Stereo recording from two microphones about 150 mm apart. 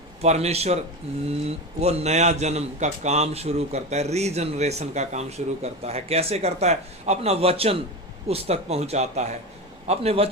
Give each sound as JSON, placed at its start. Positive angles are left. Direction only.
{"t": 0.2, "sound": "a man's voice", "side_deg": -45}